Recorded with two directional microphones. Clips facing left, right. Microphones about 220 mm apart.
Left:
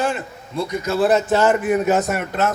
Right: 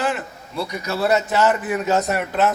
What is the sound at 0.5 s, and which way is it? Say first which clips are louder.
A man's voice: left 4 dB; 50° left (ahead or behind).